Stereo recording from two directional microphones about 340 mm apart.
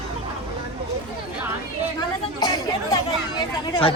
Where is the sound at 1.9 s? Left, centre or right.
Centre.